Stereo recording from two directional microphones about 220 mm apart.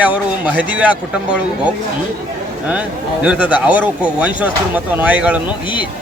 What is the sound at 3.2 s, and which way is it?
Speech, 5° right (ahead or behind).